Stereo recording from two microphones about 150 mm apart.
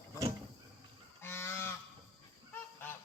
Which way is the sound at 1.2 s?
15° left (ahead or behind).